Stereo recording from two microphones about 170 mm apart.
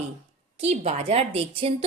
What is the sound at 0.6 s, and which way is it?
A woman's voice, 40° right (ahead or behind).